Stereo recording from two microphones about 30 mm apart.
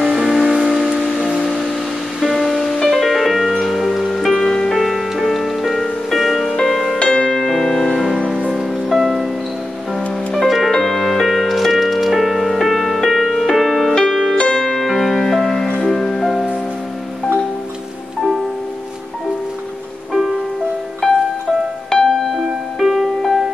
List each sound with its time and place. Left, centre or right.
0.0 s music: right
0.9 s music: centre
2.2 s music: centre
4.1 s music: centre
4.7 s music: centre
6.5 s music: centre
7.0 s music: left
7.6 s music: centre
8.5 s music: centre
10.3 s music: centre
14.3 s music: left
14.7 s music: centre
21.0 s music: centre
22.1 s music: centre